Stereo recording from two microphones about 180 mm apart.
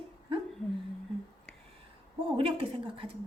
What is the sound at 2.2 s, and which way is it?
Speech, 30° right (ahead or behind).